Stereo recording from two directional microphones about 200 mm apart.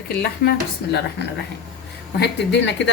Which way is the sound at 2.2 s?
60° left (ahead or behind).